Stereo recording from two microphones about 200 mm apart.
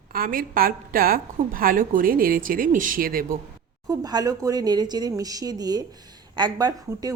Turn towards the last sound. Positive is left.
turn(degrees=-20)  # may be behind; listen again after turning